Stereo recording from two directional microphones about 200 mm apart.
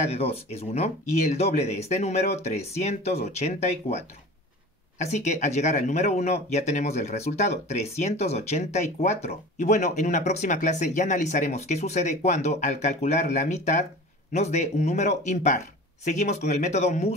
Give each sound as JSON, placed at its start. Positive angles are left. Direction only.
{"t": 0.0, "sound": "speech", "side_deg": 30}